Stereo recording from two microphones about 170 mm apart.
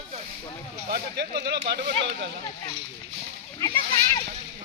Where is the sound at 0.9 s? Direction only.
65° right (ahead or behind).